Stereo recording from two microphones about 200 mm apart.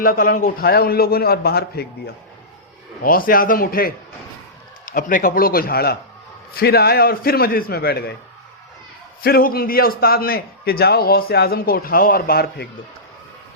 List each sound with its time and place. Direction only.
0.0 s a man's voice: 45° left (ahead or behind)
9.2 s a man's voice: 50° left (ahead or behind)